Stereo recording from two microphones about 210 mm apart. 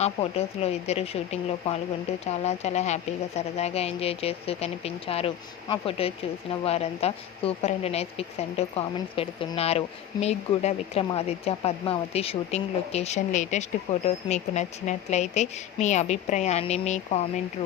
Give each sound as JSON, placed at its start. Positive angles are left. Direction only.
{"t": 0.0, "sound": "a woman's voice", "side_deg": 30}